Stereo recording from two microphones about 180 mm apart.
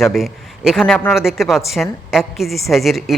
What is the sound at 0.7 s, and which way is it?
A woman's voice, centre (ahead or behind).